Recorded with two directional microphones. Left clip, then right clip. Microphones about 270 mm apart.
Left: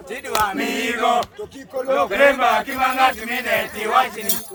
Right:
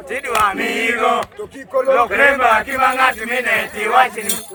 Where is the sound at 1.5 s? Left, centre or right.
Centre.